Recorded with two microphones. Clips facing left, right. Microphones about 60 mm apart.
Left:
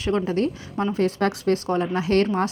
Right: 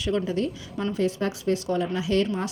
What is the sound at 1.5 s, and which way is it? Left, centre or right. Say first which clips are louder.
Speech: left 3 dB; left.